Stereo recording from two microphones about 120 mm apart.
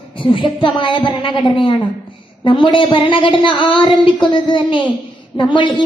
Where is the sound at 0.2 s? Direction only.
45° left (ahead or behind).